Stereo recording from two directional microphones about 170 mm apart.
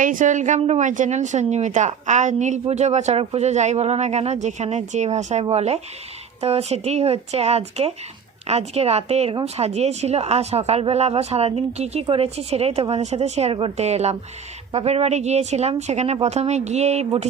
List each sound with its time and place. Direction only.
0.0 s a woman's voice: 50° right (ahead or behind)